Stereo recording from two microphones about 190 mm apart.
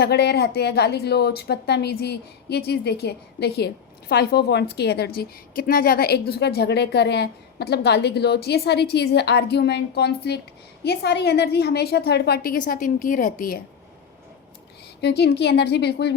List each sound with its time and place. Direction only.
0.0 s a woman's voice: 60° left (ahead or behind)
15.0 s a woman's voice: 60° left (ahead or behind)